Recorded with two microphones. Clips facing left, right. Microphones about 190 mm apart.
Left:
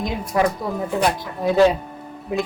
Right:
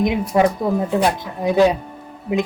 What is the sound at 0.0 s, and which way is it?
A woman's voice, 20° right (ahead or behind).